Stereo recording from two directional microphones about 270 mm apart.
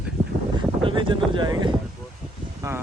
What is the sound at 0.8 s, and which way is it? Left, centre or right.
Speech, centre.